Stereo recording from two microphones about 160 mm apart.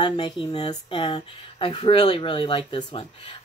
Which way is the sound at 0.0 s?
30° left (ahead or behind).